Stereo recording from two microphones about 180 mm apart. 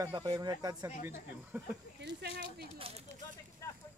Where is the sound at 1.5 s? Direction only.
10° right (ahead or behind).